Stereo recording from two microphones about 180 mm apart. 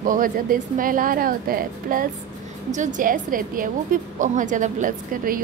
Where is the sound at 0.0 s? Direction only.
50° right (ahead or behind).